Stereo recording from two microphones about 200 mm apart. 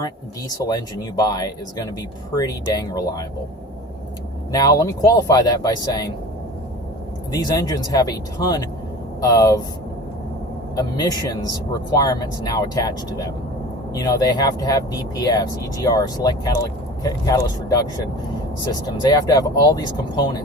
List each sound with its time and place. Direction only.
0.6 s speech: 20° left (ahead or behind)
4.5 s speech: 20° left (ahead or behind)
7.3 s speech: 20° left (ahead or behind)
10.8 s speech: 20° left (ahead or behind)